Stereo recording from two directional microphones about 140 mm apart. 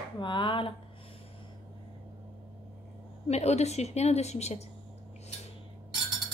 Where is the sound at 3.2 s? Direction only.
50° left (ahead or behind).